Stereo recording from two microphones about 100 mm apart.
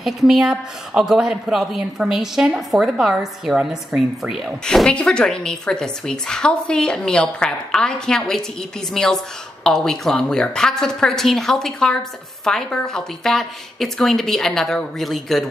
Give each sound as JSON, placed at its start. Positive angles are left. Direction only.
{"t": 0.0, "sound": "speech", "side_deg": -5}
{"t": 4.6, "sound": "speech", "side_deg": 10}